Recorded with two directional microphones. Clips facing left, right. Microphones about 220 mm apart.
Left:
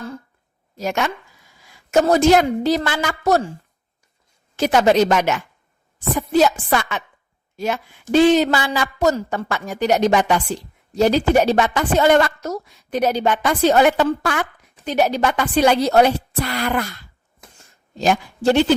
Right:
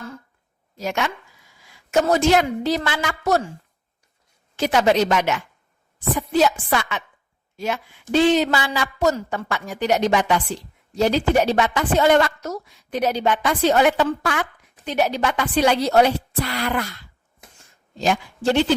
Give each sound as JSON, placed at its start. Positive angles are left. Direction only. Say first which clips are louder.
{"t": 0.8, "sound": "a woman's voice", "louder": "left 2 dB", "side_deg": 45}
{"t": 4.5, "sound": "a woman's voice", "louder": "left 3 dB", "side_deg": 45}
{"t": 18.0, "sound": "a man's voice", "louder": "left 3 dB", "side_deg": 45}